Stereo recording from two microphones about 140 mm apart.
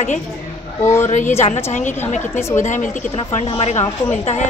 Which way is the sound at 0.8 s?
20° left (ahead or behind).